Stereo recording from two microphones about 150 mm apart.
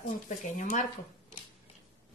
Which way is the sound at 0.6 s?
55° left (ahead or behind).